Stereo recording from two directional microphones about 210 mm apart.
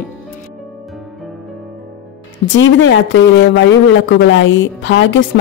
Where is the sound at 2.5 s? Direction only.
60° left (ahead or behind).